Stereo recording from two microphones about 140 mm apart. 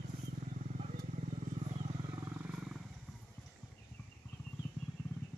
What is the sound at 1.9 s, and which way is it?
Wild animals, 30° right (ahead or behind).